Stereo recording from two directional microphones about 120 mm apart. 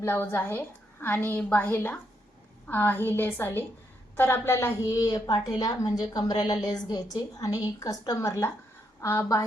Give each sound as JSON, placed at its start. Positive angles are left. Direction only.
{"t": 0.0, "sound": "a woman's voice", "side_deg": 20}